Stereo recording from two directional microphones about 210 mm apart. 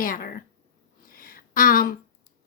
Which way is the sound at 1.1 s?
45° left (ahead or behind).